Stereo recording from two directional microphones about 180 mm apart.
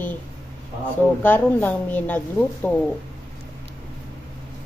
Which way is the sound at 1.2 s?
10° left (ahead or behind).